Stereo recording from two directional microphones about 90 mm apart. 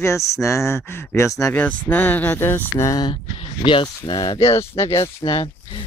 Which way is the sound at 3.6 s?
70° left (ahead or behind).